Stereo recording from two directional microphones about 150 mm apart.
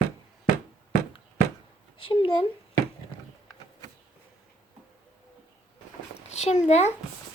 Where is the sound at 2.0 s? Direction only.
35° left (ahead or behind).